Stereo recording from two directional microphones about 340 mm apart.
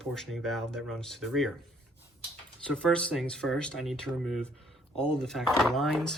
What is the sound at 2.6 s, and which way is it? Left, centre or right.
Speech, centre.